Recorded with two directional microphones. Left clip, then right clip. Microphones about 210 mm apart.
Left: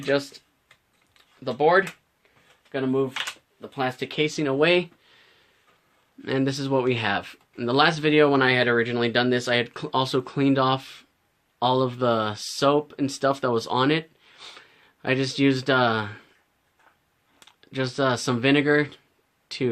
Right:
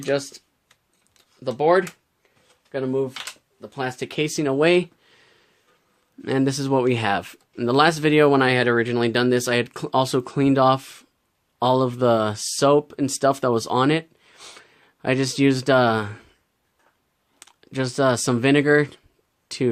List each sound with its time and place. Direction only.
0.1 s speech: 50° right (ahead or behind)
1.5 s speech: 55° right (ahead or behind)
2.7 s speech: 40° right (ahead or behind)
17.6 s speech: 45° right (ahead or behind)